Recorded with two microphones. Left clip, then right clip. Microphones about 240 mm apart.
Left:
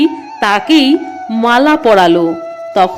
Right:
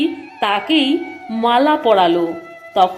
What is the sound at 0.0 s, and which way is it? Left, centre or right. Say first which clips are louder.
A woman's voice: left 6 dB; centre.